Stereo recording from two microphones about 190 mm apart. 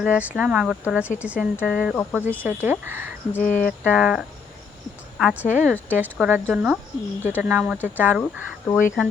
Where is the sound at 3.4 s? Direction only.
45° left (ahead or behind).